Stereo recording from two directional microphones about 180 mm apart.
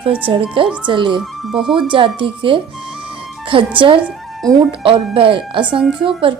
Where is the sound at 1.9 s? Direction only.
30° right (ahead or behind).